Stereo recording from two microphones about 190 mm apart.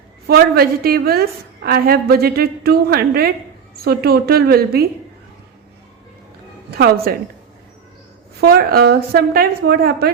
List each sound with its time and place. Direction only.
0.3 s a woman's voice: 55° right (ahead or behind)
6.7 s a woman's voice: 55° right (ahead or behind)
8.4 s a woman's voice: 55° right (ahead or behind)